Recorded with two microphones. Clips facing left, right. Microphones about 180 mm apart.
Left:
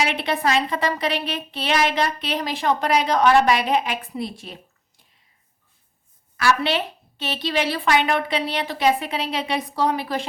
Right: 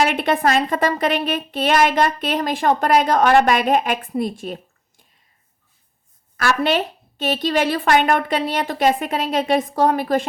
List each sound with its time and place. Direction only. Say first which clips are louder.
0.0 s a woman's voice: right 5 dB; 50° right (ahead or behind)
6.3 s a woman's voice: right 2 dB; 45° right (ahead or behind)